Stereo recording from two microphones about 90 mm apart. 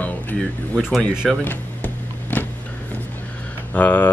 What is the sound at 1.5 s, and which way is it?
Music, 20° left (ahead or behind).